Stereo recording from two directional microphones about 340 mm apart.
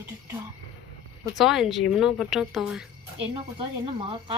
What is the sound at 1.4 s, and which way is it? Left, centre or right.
Speech, centre.